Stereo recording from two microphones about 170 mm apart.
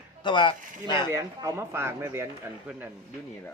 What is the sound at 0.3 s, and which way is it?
Speech, 30° left (ahead or behind).